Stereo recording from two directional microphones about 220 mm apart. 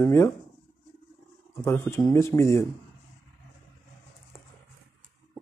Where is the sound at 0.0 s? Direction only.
10° left (ahead or behind).